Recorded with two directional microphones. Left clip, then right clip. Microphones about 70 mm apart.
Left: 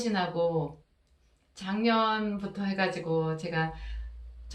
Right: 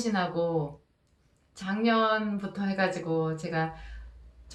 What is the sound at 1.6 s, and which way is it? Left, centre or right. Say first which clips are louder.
A woman's voice: right 1 dB; right.